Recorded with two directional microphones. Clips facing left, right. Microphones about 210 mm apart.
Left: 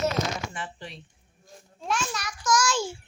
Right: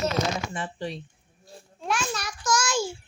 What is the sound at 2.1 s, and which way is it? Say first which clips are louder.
Child singing: left 1 dB; 30° right (ahead or behind).